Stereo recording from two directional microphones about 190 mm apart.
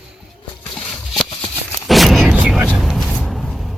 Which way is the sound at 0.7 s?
5° left (ahead or behind).